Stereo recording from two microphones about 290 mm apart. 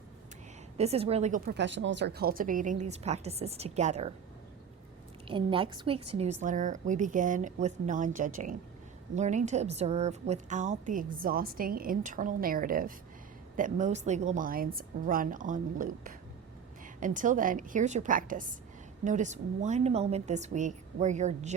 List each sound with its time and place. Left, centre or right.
0.8 s a woman's voice: right
5.3 s a woman's voice: centre